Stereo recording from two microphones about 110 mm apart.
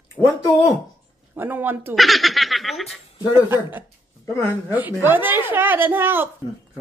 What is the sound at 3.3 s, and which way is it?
A woman's voice, 20° right (ahead or behind).